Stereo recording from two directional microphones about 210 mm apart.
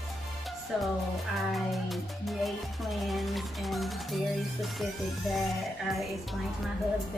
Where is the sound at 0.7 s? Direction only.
5° right (ahead or behind).